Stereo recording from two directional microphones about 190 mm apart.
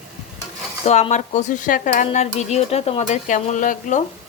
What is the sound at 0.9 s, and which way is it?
Speech, 35° left (ahead or behind).